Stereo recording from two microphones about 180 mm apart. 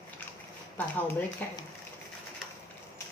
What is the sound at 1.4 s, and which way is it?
Speech, 10° left (ahead or behind).